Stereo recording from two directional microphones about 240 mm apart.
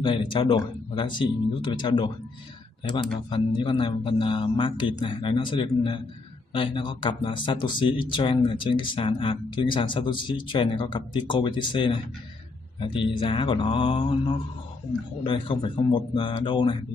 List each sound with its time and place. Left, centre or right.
0.0 s speech: centre